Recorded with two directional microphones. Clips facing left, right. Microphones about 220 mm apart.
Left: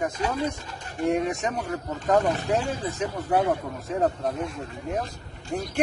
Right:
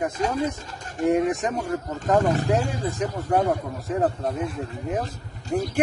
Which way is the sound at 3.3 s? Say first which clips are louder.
Right 1 dB; 5° left (ahead or behind).